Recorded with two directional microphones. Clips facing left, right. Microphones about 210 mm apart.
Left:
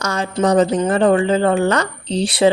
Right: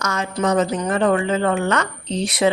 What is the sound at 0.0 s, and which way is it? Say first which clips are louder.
Speech: left 3 dB; 30° left (ahead or behind).